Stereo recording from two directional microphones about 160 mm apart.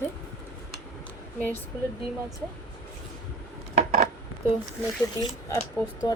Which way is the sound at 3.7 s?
50° right (ahead or behind).